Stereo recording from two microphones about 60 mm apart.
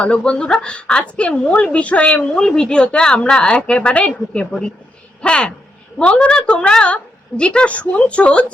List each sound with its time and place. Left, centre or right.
0.0 s a woman's voice: centre